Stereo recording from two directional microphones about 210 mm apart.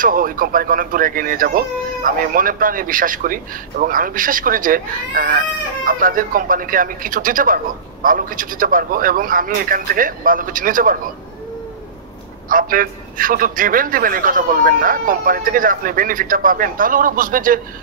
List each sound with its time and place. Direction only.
0.0 s speech: 40° right (ahead or behind)
12.4 s speech: 40° right (ahead or behind)